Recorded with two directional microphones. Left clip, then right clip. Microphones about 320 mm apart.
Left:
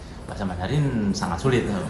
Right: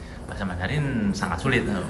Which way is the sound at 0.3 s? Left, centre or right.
Centre.